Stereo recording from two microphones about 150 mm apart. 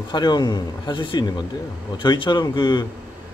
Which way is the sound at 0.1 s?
30° left (ahead or behind).